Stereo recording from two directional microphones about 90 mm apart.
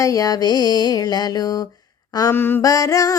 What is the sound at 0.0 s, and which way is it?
Mantra, 40° left (ahead or behind).